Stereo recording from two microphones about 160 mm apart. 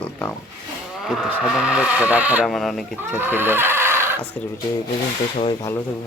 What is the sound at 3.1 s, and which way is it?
Neigh, 10° right (ahead or behind).